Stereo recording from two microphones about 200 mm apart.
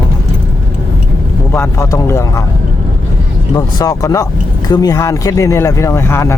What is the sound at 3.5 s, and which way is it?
Speech, 20° left (ahead or behind).